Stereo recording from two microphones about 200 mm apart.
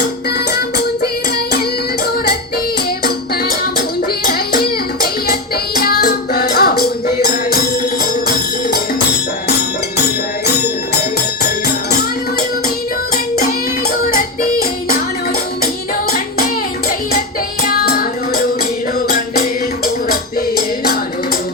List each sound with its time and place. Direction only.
5.3 s music: 50° left (ahead or behind)
17.7 s music: 50° left (ahead or behind)